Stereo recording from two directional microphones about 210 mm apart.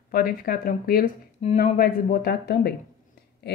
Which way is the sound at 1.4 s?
30° left (ahead or behind).